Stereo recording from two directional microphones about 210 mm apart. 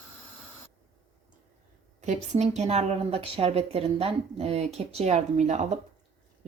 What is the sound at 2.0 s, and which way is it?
Speech, 35° right (ahead or behind).